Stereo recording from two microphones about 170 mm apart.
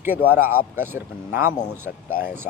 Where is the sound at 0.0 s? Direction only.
10° right (ahead or behind).